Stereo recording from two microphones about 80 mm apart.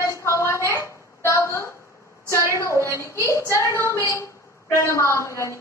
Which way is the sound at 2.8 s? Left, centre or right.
Left.